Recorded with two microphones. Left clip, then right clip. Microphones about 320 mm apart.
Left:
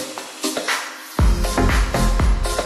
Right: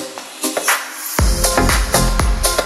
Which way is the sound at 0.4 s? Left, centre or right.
Centre.